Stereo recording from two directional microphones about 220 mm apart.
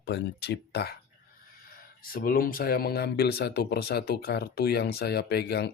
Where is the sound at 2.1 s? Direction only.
40° left (ahead or behind).